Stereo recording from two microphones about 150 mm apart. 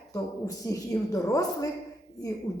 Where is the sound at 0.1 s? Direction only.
20° left (ahead or behind).